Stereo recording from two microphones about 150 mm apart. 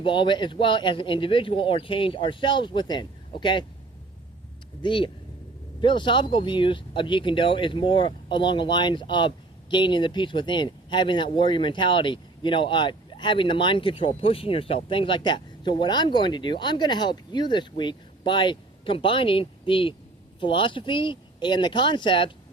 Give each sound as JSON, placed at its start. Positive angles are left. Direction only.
{"t": 0.0, "sound": "speech", "side_deg": 35}
{"t": 4.8, "sound": "speech", "side_deg": 35}